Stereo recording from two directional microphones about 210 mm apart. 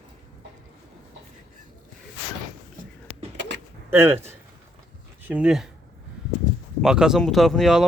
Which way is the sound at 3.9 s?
10° right (ahead or behind).